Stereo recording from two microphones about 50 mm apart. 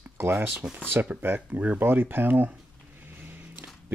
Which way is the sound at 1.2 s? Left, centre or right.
Right.